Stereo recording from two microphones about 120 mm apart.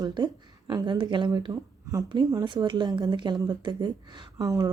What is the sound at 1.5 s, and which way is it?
Speech, 30° right (ahead or behind).